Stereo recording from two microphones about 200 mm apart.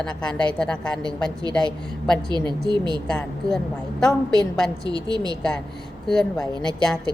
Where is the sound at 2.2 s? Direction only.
20° right (ahead or behind).